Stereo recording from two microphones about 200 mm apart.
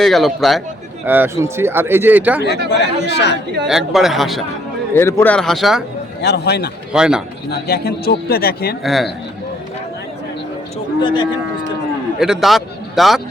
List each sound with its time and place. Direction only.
0.0 s speech: centre (ahead or behind)
1.0 s speech: 10° right (ahead or behind)
2.6 s speech: 60° left (ahead or behind)
3.7 s speech: centre (ahead or behind)
4.9 s speech: 10° left (ahead or behind)
6.2 s speech: 55° left (ahead or behind)
6.9 s speech: 5° right (ahead or behind)
7.5 s a man's voice: 55° left (ahead or behind)
8.8 s speech: centre (ahead or behind)
11.0 s speech: 20° left (ahead or behind)
12.2 s a man's voice: centre (ahead or behind)